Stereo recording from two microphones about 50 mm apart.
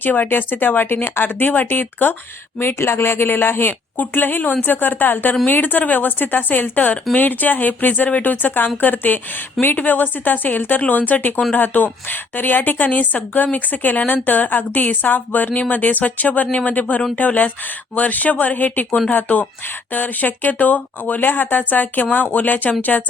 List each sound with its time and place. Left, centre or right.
0.0 s a woman's voice: left
18.9 s speech: centre
19.1 s a woman's voice: left